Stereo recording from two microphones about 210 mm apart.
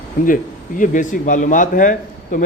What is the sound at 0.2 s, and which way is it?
A man's voice, 40° left (ahead or behind).